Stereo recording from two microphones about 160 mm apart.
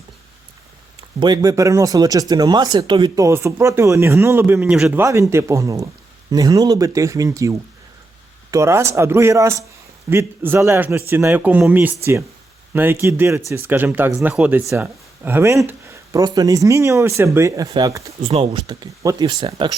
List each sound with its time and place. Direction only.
1.2 s speech: 25° right (ahead or behind); by 5.0 s 10° right (ahead or behind)
5.0 s speech: 20° right (ahead or behind)
18.2 s speech: 35° right (ahead or behind)